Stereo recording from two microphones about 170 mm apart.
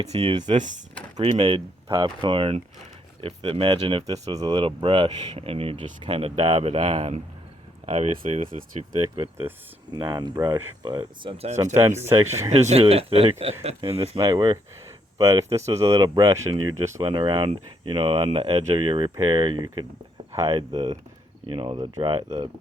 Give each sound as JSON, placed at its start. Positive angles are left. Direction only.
{"t": 0.1, "sound": "speech", "side_deg": -35}
{"t": 12.0, "sound": "speech", "side_deg": -15}
{"t": 12.5, "sound": "speech", "side_deg": -40}
{"t": 17.0, "sound": "speech", "side_deg": -30}